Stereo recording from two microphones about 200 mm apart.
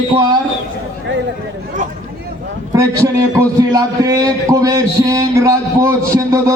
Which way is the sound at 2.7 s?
15° right (ahead or behind).